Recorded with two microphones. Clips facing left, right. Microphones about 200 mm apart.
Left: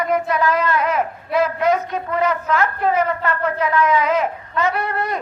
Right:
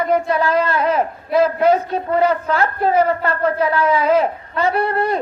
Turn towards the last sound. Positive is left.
turn(degrees=-30)  # may be behind; listen again after turning